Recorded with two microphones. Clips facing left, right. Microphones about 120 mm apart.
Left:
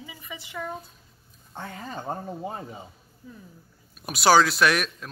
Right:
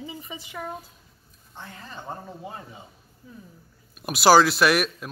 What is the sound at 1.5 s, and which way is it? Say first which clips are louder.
Speech: left 5 dB; 50° left (ahead or behind).